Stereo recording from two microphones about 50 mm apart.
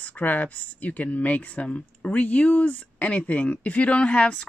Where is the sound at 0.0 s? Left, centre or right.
Left.